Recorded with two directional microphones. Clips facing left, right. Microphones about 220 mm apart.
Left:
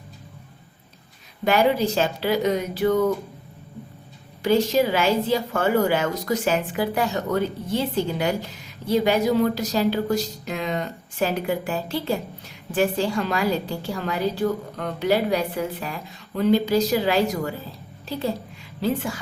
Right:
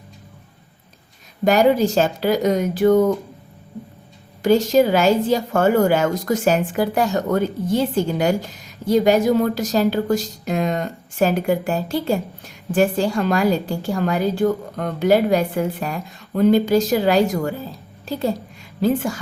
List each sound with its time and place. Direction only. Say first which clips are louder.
1.5 s a woman's voice: right 4 dB; 45° right (ahead or behind)
4.4 s a woman's voice: right 4 dB; 45° right (ahead or behind)
18.8 s a woman's voice: right 5 dB; 45° right (ahead or behind)